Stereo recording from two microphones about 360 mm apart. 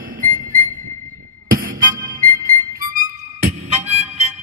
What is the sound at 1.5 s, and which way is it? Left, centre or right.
Music, right.